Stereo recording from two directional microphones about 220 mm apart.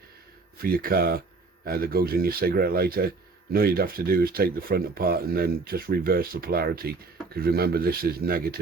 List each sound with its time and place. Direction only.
0.6 s speech: 40° right (ahead or behind)